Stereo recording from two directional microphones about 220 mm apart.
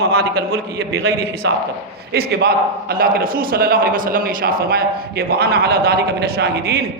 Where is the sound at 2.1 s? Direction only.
45° right (ahead or behind).